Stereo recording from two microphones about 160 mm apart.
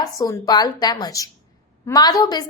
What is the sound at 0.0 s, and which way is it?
A woman's voice, 20° left (ahead or behind).